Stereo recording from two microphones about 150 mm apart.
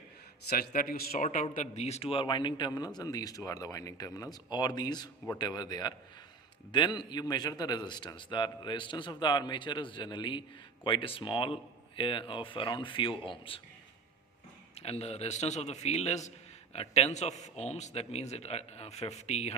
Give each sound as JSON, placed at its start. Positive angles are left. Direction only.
{"t": 0.4, "sound": "a man's voice", "side_deg": 85}
{"t": 14.8, "sound": "a man's voice", "side_deg": 45}